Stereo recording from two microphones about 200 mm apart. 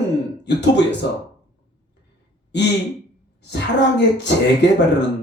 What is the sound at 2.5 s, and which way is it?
Speech, 60° left (ahead or behind).